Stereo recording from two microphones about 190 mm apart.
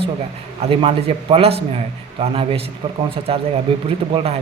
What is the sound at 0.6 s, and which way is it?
Speech, 30° right (ahead or behind).